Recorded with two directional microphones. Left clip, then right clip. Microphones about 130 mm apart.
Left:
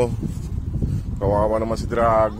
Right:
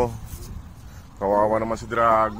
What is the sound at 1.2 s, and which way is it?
Speech, 55° left (ahead or behind).